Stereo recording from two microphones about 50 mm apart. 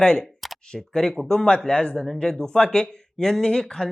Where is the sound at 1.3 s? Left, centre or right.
Centre.